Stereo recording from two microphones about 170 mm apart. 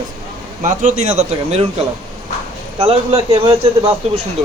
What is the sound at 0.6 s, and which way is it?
Speech, 45° right (ahead or behind).